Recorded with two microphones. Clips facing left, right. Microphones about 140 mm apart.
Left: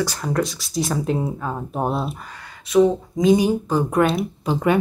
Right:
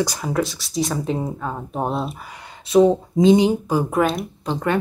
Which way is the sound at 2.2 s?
20° right (ahead or behind).